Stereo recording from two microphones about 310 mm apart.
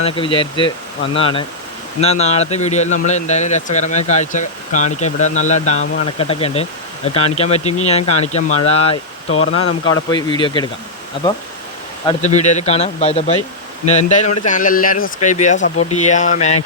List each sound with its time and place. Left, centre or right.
0.0 s speech: centre
12.0 s speech: left